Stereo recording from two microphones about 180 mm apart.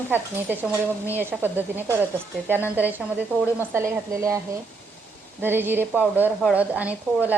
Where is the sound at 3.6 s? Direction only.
15° right (ahead or behind).